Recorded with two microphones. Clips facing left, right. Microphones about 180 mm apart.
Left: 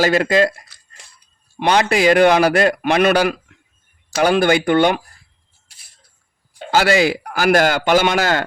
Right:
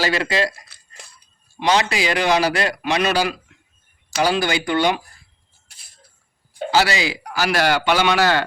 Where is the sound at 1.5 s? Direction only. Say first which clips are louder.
Left 3 dB; 60° left (ahead or behind).